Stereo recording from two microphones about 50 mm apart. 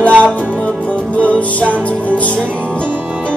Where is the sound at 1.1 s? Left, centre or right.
Left.